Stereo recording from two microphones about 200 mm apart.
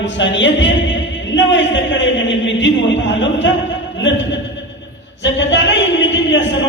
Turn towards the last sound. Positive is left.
turn(degrees=65)  # may be behind; listen again after turning